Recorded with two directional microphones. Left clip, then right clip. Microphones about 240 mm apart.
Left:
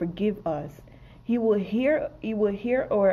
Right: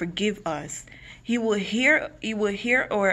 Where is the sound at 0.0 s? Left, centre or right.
Centre.